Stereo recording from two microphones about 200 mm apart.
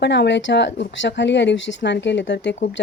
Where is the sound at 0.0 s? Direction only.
60° left (ahead or behind).